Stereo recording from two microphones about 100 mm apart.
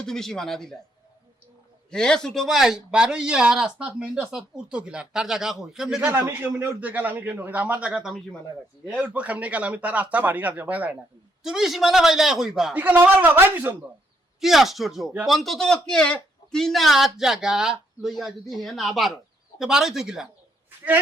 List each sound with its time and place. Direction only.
0.0 s a man's voice: 5° left (ahead or behind)
1.9 s speech: 10° left (ahead or behind)
6.1 s speech: 20° right (ahead or behind)
11.4 s a man's voice: 5° right (ahead or behind)
12.7 s speech: 15° right (ahead or behind)
14.4 s a man's voice: centre (ahead or behind)
20.7 s a sound: 20° right (ahead or behind)